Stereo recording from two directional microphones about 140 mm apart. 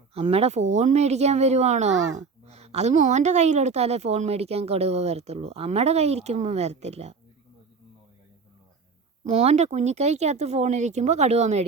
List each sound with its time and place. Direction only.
0.1 s speech: 45° right (ahead or behind)
9.2 s speech: 50° right (ahead or behind)